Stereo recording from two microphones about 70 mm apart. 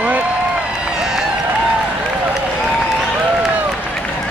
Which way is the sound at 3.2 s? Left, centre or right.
Centre.